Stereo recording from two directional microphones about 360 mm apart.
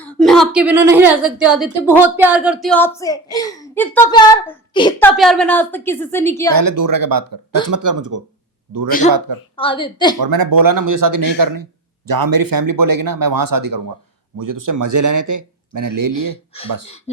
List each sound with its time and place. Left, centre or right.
0.0 s a woman's voice: centre
6.5 s speech: right
9.6 s a woman's voice: centre
10.2 s speech: right